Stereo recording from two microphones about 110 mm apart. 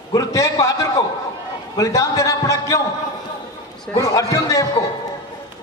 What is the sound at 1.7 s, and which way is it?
A man's voice, 30° left (ahead or behind).